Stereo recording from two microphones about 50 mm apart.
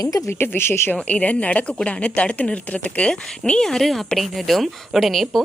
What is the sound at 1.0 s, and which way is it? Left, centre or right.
Speech, left.